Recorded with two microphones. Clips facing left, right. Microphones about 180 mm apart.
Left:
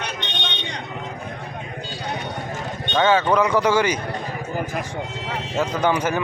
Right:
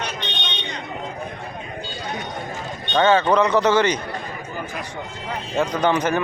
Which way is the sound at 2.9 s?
5° left (ahead or behind).